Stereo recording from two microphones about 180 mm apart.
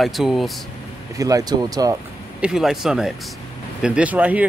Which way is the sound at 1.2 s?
20° right (ahead or behind).